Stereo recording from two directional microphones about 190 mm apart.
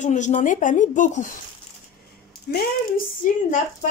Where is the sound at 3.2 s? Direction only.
45° left (ahead or behind).